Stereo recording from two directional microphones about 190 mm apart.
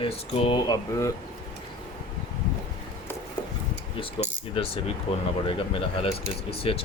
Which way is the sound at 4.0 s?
25° left (ahead or behind).